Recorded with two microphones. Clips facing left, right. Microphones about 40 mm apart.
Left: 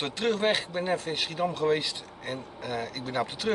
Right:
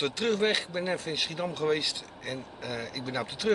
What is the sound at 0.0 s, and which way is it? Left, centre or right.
Speech, centre.